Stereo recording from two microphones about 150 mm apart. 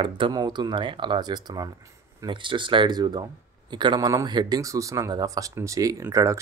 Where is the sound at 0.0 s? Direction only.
30° right (ahead or behind).